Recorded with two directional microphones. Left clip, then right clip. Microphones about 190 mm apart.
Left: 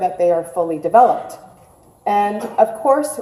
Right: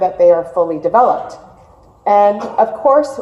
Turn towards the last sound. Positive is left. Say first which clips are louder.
# right 3 dB
turn(degrees=35)  # may be behind; listen again after turning